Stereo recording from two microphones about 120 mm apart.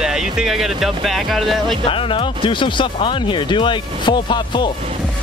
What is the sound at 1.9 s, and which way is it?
Speech, 50° left (ahead or behind).